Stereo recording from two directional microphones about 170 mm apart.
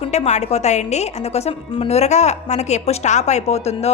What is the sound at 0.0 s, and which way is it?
A woman's voice, 40° left (ahead or behind).